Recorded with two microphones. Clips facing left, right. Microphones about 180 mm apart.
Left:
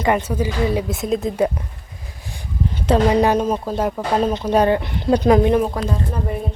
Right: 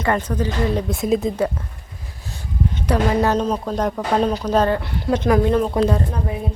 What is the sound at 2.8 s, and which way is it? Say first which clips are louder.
A woman's voice: left 3 dB; 20° left (ahead or behind).